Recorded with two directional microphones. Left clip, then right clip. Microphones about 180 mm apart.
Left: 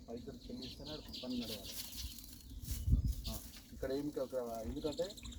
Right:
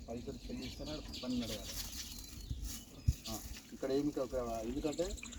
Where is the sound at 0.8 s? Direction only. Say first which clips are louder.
Right 2 dB; 15° left (ahead or behind).